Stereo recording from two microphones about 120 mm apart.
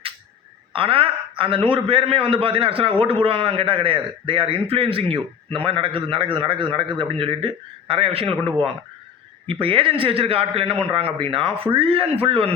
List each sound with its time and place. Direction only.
0.7 s a man's voice: 50° right (ahead or behind)